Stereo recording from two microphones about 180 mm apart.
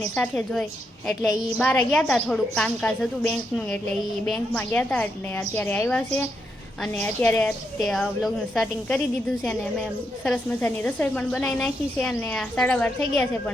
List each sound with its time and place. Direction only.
0.2 s a woman's voice: 5° left (ahead or behind)